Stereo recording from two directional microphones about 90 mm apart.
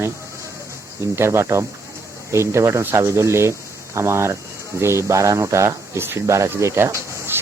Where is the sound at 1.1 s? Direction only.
30° right (ahead or behind).